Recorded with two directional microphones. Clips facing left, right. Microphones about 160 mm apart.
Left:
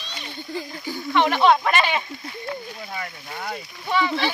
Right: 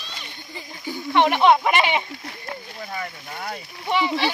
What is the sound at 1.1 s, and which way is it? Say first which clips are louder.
Speech: right 1 dB; 20° right (ahead or behind).